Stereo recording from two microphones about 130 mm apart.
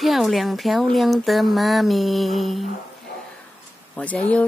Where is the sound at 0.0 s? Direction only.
Centre (ahead or behind).